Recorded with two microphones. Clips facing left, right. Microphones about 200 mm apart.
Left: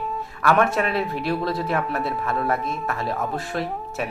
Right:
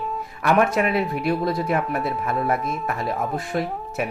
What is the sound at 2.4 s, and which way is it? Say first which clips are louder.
Speech: right 1 dB; centre (ahead or behind).